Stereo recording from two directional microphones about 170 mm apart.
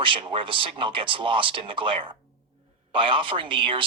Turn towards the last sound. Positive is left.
turn(degrees=-30)  # may be behind; listen again after turning